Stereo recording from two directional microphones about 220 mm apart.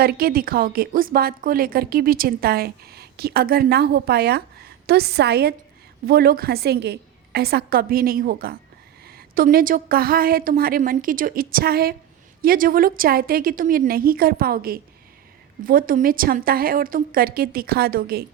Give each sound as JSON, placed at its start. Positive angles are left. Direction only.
{"t": 0.0, "sound": "a woman's voice", "side_deg": -45}